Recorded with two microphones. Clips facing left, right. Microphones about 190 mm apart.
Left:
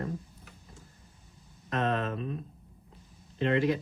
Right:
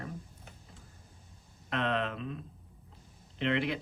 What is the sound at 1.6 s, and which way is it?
Speech, 45° left (ahead or behind).